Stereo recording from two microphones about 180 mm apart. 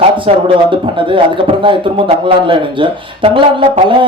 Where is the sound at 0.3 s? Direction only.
30° right (ahead or behind).